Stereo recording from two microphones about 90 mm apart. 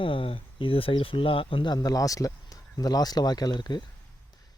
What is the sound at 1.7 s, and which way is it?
Speech, 45° left (ahead or behind).